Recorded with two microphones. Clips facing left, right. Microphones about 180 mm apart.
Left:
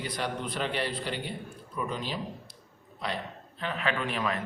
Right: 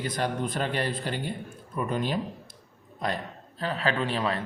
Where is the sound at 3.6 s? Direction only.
35° right (ahead or behind).